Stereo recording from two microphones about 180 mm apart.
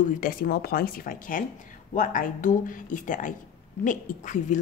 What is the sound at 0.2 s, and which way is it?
A woman's voice, 55° left (ahead or behind).